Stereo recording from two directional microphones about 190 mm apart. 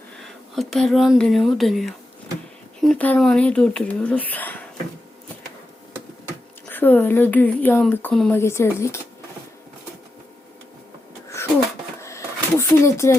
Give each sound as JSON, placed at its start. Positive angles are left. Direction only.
{"t": 0.2, "sound": "speech", "side_deg": 0}
{"t": 6.7, "sound": "speech", "side_deg": 10}
{"t": 11.3, "sound": "wheeze", "side_deg": 15}
{"t": 12.0, "sound": "a sound", "side_deg": 15}